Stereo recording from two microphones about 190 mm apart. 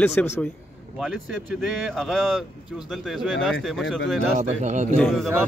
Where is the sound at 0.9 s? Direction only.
Centre (ahead or behind).